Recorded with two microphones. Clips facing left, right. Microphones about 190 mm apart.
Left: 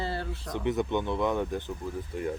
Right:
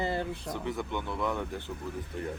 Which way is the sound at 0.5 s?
20° left (ahead or behind).